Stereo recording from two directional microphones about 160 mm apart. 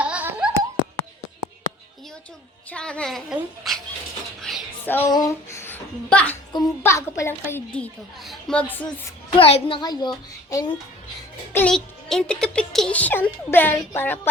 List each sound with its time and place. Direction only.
0.0 s a sound: 10° right (ahead or behind)
2.6 s speech: 5° left (ahead or behind)
4.4 s a sound: centre (ahead or behind)
4.9 s a child's voice: 15° left (ahead or behind)
6.5 s a child's voice: 20° left (ahead or behind)
9.3 s a child's voice: 35° left (ahead or behind)
11.5 s a child's voice: 5° left (ahead or behind)